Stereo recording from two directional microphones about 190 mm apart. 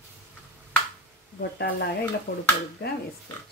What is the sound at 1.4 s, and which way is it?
Speech, 60° left (ahead or behind).